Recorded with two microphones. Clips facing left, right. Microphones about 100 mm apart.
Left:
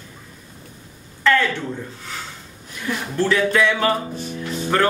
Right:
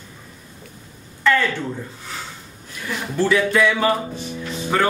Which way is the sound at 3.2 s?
5° right (ahead or behind).